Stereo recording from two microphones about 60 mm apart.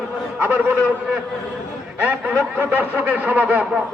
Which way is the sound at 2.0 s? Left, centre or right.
Right.